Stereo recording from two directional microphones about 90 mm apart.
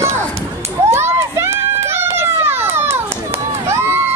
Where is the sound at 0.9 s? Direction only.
30° right (ahead or behind).